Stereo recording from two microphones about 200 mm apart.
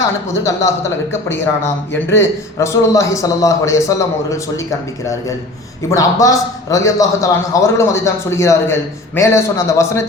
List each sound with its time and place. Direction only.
1.1 s a man's voice: 10° left (ahead or behind)
5.9 s a man's voice: 15° left (ahead or behind)